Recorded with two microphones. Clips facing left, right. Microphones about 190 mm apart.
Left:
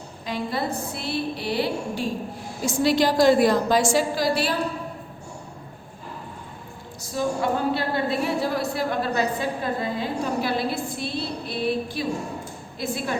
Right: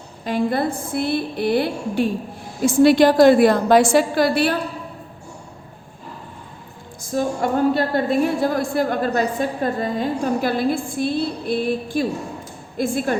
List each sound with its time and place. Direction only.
0.3 s a woman's voice: 55° right (ahead or behind)
7.1 s a woman's voice: 45° right (ahead or behind)